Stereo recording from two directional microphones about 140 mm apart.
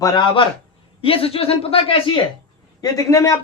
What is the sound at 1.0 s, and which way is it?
A man's voice, 40° left (ahead or behind).